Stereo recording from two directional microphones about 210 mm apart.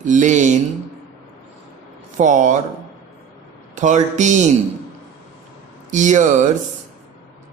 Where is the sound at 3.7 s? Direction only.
35° right (ahead or behind).